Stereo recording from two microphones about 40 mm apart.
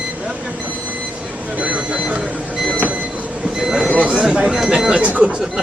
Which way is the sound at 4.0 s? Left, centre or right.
Right.